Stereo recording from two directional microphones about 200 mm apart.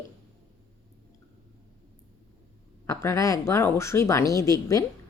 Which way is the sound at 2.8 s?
15° left (ahead or behind).